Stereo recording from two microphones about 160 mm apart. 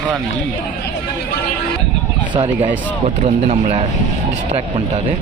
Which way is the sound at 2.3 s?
30° right (ahead or behind).